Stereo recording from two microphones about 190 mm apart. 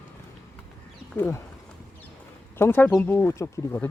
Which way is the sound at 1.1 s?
10° left (ahead or behind).